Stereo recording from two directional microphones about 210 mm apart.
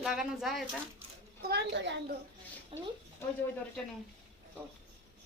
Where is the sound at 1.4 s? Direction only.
50° right (ahead or behind).